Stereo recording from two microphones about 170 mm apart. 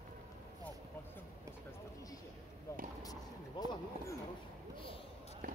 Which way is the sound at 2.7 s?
15° left (ahead or behind).